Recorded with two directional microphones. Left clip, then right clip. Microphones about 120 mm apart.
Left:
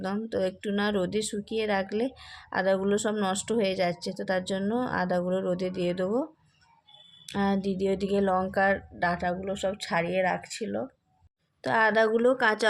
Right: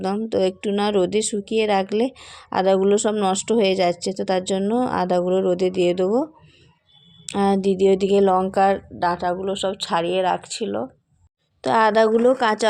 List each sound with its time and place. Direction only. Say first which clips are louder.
0.0 s speech: right 8 dB; 30° right (ahead or behind)
7.3 s a woman's voice: right 9 dB; 35° right (ahead or behind); by 10.8 s 20° right (ahead or behind)
11.6 s a woman's voice: right 7 dB; 35° right (ahead or behind); by 12.6 s 10° right (ahead or behind)